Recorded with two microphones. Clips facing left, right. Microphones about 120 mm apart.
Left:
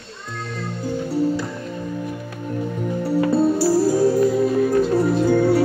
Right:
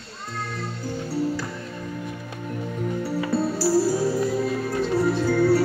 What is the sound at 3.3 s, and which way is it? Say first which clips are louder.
Music: left 4 dB; 20° left (ahead or behind).